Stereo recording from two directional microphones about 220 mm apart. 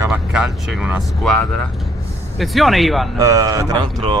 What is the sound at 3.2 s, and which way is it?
Speech, 15° right (ahead or behind).